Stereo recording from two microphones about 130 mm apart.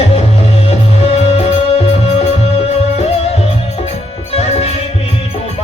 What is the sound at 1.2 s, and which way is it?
Music, 50° left (ahead or behind).